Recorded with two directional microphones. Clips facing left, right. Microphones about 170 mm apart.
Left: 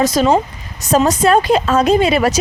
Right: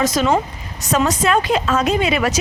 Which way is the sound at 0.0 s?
30° left (ahead or behind).